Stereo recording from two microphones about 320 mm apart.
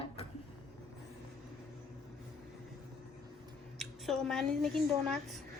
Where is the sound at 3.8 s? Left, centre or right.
Centre.